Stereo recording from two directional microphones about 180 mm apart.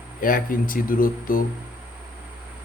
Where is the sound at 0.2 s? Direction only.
50° left (ahead or behind).